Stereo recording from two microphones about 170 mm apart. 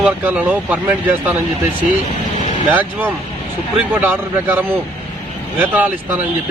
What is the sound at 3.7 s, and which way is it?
Speech, 10° right (ahead or behind).